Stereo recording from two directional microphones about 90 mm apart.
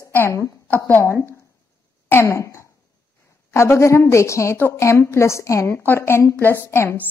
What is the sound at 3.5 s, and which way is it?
A woman's voice, 30° left (ahead or behind).